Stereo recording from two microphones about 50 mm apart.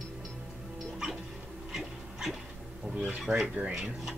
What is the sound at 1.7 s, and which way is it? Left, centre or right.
Dog, centre.